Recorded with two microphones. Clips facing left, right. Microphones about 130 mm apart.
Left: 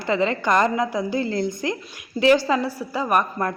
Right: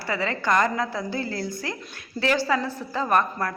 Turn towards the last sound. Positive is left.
turn(degrees=20)  # may be behind; listen again after turning